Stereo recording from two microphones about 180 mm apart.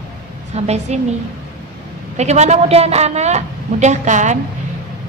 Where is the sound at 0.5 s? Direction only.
35° right (ahead or behind).